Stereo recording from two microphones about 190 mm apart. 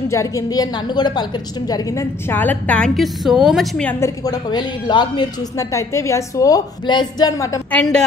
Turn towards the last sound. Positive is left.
turn(degrees=15)  # may be behind; listen again after turning